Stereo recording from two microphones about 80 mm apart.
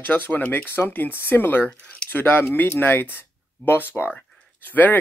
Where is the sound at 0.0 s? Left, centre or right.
Left.